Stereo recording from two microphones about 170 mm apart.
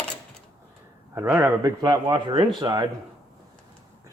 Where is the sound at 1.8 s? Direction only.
25° right (ahead or behind).